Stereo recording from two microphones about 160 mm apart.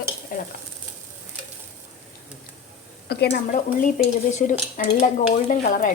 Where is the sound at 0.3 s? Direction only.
60° left (ahead or behind).